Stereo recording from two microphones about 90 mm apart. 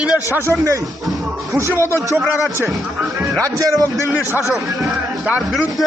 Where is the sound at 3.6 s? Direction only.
35° right (ahead or behind).